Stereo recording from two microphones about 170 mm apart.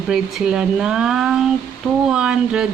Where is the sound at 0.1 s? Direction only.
5° right (ahead or behind).